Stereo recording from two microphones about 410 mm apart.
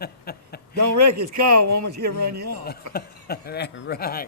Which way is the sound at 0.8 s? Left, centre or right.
Right.